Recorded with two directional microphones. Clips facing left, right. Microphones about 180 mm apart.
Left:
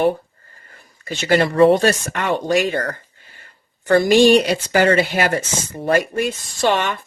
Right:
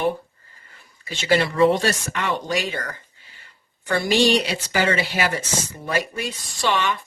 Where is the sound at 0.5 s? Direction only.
50° left (ahead or behind).